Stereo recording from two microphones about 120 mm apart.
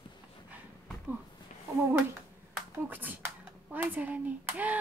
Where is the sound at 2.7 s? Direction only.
15° right (ahead or behind).